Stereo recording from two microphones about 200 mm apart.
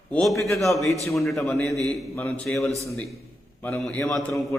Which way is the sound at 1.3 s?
15° left (ahead or behind).